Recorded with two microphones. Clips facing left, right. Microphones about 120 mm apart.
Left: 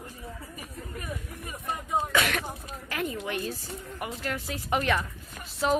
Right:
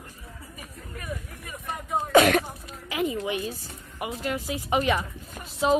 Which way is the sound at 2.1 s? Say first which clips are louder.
Right 14 dB; 40° right (ahead or behind).